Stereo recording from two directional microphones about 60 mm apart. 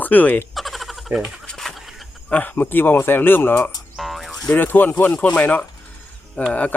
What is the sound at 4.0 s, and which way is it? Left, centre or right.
Frog, centre.